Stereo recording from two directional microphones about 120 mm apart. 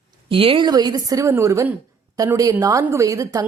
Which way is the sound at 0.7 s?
35° right (ahead or behind).